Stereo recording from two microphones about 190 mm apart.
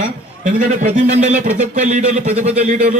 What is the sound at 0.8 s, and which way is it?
Speech, 40° right (ahead or behind).